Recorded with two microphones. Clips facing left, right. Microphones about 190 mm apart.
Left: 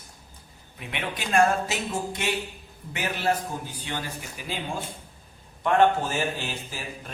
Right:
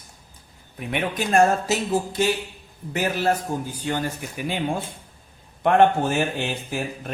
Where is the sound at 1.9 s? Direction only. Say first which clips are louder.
Right 7 dB; 30° right (ahead or behind).